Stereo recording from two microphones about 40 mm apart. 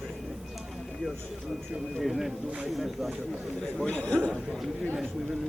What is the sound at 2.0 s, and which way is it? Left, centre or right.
Speech, centre.